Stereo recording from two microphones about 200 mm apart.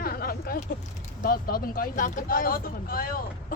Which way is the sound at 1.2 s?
45° left (ahead or behind).